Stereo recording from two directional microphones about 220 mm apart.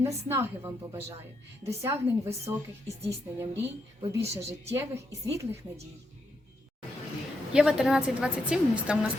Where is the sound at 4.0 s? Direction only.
25° right (ahead or behind).